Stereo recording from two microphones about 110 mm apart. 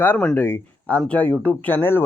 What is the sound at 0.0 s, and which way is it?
Speech, 15° left (ahead or behind).